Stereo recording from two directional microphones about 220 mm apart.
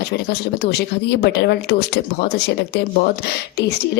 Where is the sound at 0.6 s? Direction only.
50° left (ahead or behind).